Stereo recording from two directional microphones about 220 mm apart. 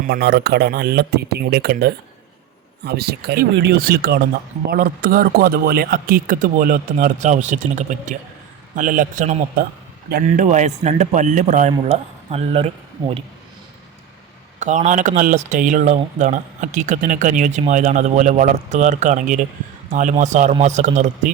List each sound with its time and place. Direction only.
0.0 s speech: 45° right (ahead or behind); by 13.2 s 25° right (ahead or behind)
14.6 s speech: 35° right (ahead or behind)